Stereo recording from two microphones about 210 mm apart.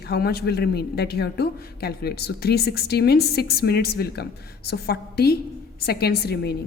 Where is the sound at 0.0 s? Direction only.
50° left (ahead or behind).